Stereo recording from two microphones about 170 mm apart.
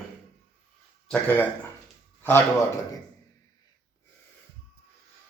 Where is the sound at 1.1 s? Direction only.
10° left (ahead or behind).